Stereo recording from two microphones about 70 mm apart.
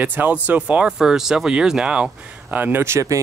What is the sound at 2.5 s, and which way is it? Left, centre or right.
Speech, right.